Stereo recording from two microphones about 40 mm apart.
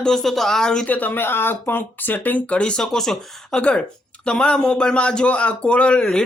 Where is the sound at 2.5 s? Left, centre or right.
Left.